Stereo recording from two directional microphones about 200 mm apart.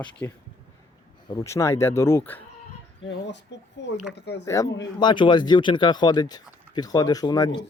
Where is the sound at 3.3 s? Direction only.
60° left (ahead or behind).